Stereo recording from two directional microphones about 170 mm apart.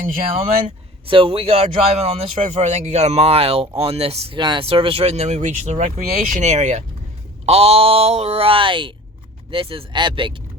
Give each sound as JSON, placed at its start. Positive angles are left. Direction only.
{"t": 1.0, "sound": "speech", "side_deg": -30}